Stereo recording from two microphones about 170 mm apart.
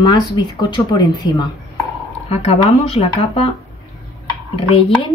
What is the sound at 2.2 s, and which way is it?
A woman's voice, 35° left (ahead or behind).